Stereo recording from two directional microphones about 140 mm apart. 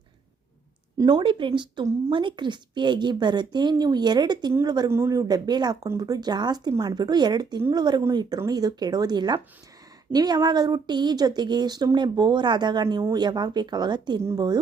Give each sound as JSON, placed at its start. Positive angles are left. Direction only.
{"t": 0.9, "sound": "speech", "side_deg": -30}
{"t": 4.9, "sound": "speech", "side_deg": -20}